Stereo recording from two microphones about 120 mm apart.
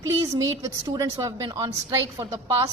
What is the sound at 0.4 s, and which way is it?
A woman's voice, 25° right (ahead or behind).